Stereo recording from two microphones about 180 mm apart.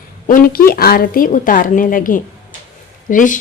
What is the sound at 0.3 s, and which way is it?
A woman's voice, 50° left (ahead or behind).